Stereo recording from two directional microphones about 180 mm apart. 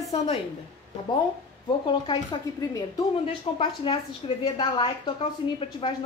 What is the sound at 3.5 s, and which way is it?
A woman's voice, 30° left (ahead or behind).